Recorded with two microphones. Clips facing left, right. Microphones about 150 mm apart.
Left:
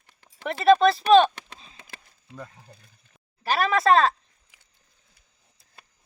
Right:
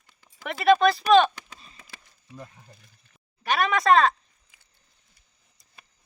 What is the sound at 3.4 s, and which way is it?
Speech, 30° left (ahead or behind).